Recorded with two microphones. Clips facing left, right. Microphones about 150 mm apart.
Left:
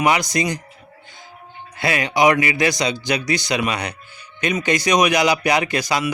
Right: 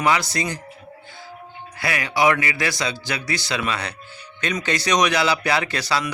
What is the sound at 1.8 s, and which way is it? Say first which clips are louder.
A man's voice: left 3 dB; 20° left (ahead or behind).